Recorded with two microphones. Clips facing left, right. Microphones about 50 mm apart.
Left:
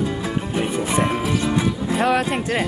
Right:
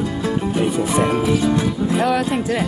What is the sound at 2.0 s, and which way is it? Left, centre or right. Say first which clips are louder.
Music: even; left.